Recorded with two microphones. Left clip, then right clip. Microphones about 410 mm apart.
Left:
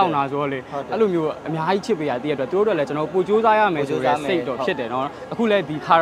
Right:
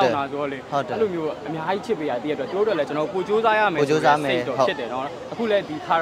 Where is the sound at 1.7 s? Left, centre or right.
Left.